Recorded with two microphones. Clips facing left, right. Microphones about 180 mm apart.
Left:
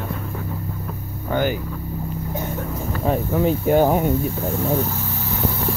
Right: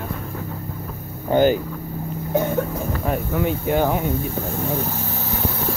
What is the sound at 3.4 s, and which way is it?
Speech, 40° left (ahead or behind).